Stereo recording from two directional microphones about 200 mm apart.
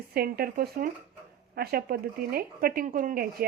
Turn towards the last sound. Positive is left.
turn(degrees=-45)  # may be behind; listen again after turning